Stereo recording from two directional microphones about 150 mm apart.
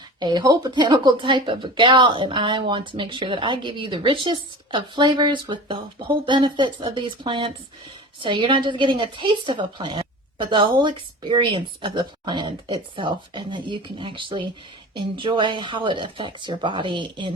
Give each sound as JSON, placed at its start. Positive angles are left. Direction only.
{"t": 0.2, "sound": "a woman's voice", "side_deg": -30}